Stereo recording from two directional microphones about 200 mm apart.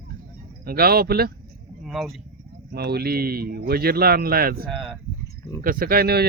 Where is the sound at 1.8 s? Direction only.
Centre (ahead or behind).